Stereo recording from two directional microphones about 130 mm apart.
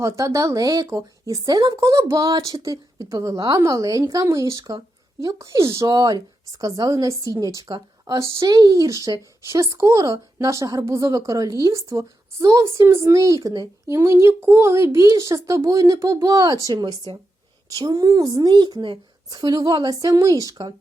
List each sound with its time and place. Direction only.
0.0 s a woman's voice: 25° right (ahead or behind)